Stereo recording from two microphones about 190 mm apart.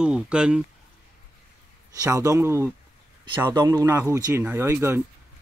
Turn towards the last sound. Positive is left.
turn(degrees=-10)  # may be behind; listen again after turning